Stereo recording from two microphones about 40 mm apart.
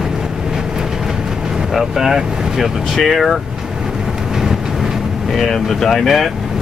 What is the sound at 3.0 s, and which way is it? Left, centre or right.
Speech, centre.